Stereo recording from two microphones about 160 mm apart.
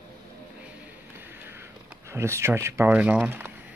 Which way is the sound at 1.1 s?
15° right (ahead or behind).